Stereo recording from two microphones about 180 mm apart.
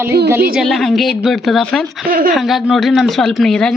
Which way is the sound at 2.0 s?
55° right (ahead or behind).